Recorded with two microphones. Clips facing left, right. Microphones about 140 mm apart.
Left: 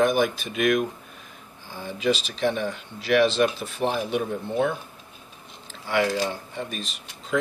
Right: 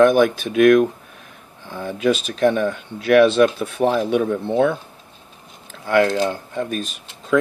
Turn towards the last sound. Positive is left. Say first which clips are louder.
# right 8 dB
turn(degrees=-50)  # may be behind; listen again after turning